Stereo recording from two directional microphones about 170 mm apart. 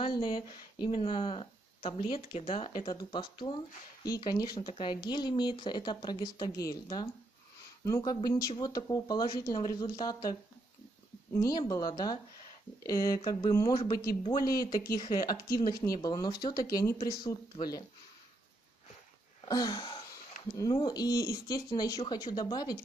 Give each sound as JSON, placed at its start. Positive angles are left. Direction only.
{"t": 0.0, "sound": "speech", "side_deg": 25}
{"t": 11.4, "sound": "speech", "side_deg": 20}
{"t": 19.4, "sound": "a sound", "side_deg": 25}
{"t": 20.5, "sound": "speech", "side_deg": 20}